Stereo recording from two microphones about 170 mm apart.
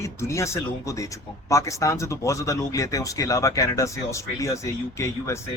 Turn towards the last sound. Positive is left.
turn(degrees=15)  # may be behind; listen again after turning